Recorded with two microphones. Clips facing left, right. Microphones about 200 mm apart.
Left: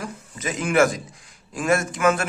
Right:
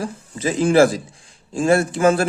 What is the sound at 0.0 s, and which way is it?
A man's voice, 30° right (ahead or behind).